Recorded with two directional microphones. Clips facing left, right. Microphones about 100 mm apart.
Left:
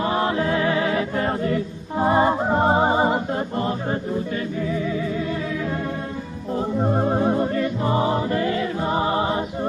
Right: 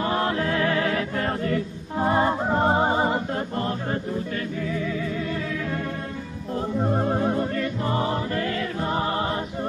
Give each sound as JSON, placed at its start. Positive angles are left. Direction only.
{"t": 0.0, "sound": "music", "side_deg": 15}
{"t": 6.5, "sound": "music", "side_deg": 15}